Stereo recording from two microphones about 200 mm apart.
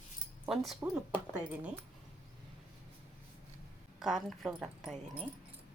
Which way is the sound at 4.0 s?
Centre (ahead or behind).